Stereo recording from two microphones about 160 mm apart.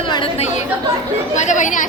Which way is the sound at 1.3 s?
50° left (ahead or behind).